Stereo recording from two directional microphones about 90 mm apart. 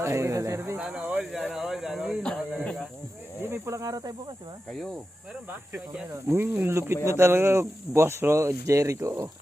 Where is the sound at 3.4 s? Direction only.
30° right (ahead or behind); by 4.5 s 50° right (ahead or behind).